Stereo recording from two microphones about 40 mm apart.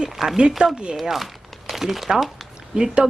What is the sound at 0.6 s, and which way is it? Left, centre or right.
Speech, right.